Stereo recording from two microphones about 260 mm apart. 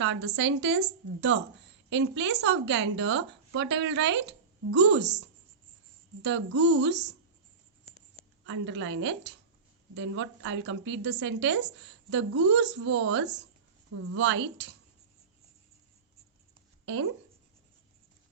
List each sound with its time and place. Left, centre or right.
0.0 s a woman's voice: right
6.6 s a woman's voice: right
8.4 s a woman's voice: right
16.8 s speech: right